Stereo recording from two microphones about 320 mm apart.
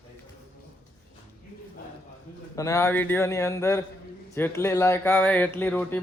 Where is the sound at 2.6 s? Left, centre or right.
Centre.